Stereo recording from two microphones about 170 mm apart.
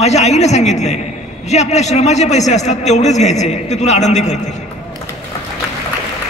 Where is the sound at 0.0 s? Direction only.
40° left (ahead or behind).